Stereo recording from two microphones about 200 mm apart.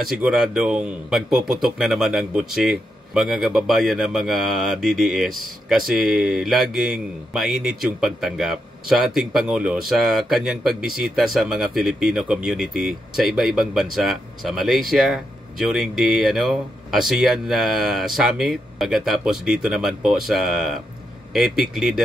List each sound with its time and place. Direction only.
0.1 s speech: 5° right (ahead or behind)